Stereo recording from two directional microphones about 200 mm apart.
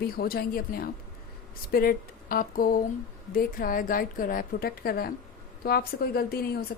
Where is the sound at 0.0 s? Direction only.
50° left (ahead or behind).